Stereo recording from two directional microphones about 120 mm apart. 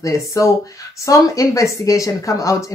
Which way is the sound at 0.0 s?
25° left (ahead or behind).